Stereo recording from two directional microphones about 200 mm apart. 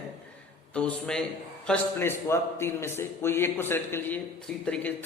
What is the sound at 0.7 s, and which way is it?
A man's voice, 5° left (ahead or behind).